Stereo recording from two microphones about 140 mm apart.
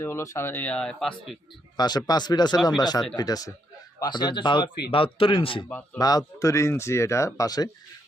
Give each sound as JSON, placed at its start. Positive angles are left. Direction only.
{"t": 0.0, "sound": "speech", "side_deg": 20}
{"t": 1.7, "sound": "speech", "side_deg": 30}
{"t": 5.6, "sound": "speech", "side_deg": 10}
{"t": 6.0, "sound": "speech", "side_deg": 25}